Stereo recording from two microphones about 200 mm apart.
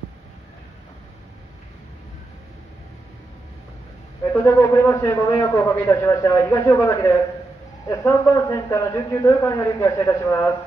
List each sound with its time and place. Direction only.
4.3 s a man's voice: 15° left (ahead or behind)